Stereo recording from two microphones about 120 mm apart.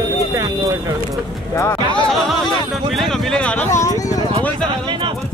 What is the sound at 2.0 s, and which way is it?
Speech, centre (ahead or behind).